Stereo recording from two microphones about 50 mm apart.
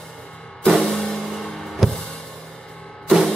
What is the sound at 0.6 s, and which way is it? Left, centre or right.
Music, centre.